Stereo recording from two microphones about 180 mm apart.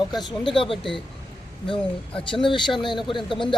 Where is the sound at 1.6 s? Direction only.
30° left (ahead or behind).